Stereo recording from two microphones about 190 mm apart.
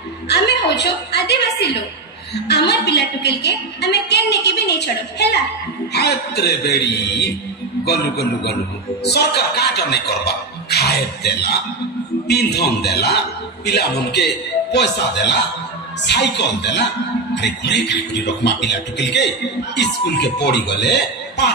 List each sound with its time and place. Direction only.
0.3 s a woman's voice: 60° left (ahead or behind)